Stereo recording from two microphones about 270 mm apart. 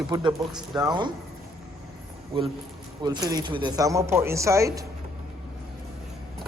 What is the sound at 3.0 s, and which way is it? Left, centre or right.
Speech, centre.